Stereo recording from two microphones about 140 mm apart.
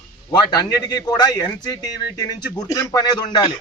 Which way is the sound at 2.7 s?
25° left (ahead or behind).